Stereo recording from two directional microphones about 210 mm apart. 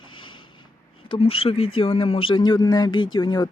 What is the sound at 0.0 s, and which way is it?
Speech, 20° left (ahead or behind).